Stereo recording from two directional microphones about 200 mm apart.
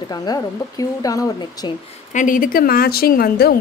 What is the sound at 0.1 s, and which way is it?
Speech, 20° left (ahead or behind).